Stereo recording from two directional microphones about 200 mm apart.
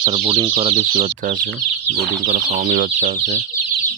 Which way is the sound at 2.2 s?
45° right (ahead or behind).